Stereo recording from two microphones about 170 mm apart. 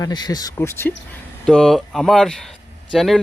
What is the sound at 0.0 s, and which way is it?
Speech, 25° left (ahead or behind).